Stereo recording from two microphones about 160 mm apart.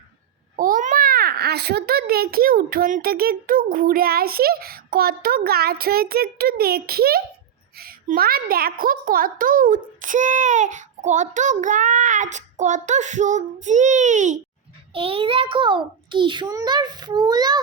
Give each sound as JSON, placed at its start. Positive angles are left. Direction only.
{"t": 0.5, "sound": "a child's voice", "side_deg": -60}
{"t": 14.9, "sound": "a child's voice", "side_deg": -35}